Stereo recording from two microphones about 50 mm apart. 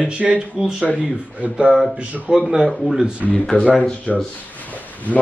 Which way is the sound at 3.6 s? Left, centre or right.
Centre.